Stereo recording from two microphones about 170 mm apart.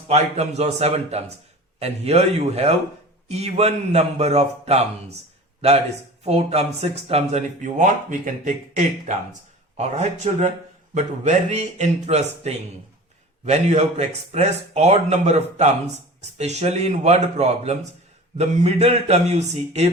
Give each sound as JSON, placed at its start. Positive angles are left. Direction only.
{"t": 0.1, "sound": "speech", "side_deg": -40}
{"t": 6.2, "sound": "speech", "side_deg": -40}